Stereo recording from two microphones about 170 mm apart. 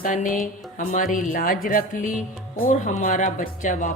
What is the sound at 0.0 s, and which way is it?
Speech, 50° left (ahead or behind).